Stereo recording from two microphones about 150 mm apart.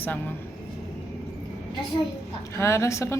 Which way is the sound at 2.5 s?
20° left (ahead or behind).